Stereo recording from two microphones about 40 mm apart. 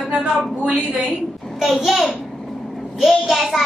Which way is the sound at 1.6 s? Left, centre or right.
Centre.